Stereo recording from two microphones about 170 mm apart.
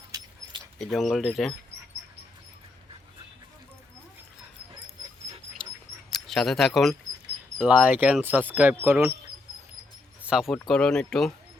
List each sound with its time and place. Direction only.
0.1 s keys jangling: 20° right (ahead or behind)
0.8 s speech: centre (ahead or behind)
5.6 s dog: 5° left (ahead or behind)
6.1 s speech: centre (ahead or behind); by 9.1 s 15° right (ahead or behind)
10.2 s speech: 5° right (ahead or behind)